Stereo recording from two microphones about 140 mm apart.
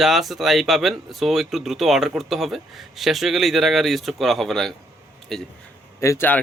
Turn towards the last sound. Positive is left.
turn(degrees=15)  # may be behind; listen again after turning